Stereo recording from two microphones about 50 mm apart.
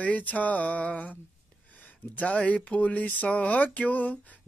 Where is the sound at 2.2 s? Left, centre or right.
Left.